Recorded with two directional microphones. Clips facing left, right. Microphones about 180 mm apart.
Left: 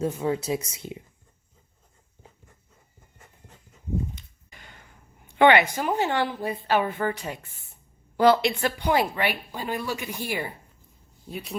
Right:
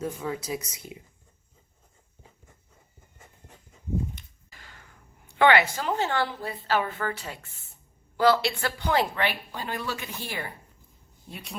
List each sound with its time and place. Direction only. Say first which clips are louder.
0.0 s speech: left 6 dB; 25° left (ahead or behind)
4.4 s a sound: left 2 dB; 20° left (ahead or behind)
5.4 s a woman's voice: left 3 dB; 20° left (ahead or behind)
11.3 s speech: left 6 dB; centre (ahead or behind)